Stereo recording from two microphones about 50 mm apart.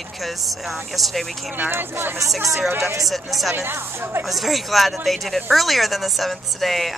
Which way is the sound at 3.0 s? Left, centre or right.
Centre.